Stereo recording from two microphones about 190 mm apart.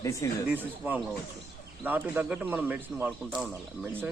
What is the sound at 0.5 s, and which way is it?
Speech, 10° right (ahead or behind).